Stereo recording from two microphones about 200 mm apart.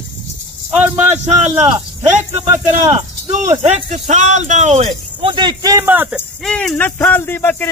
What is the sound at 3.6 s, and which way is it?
Speech, 35° right (ahead or behind).